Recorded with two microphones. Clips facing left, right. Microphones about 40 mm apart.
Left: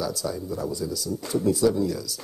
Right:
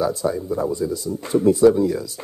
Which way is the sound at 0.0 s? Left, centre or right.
Right.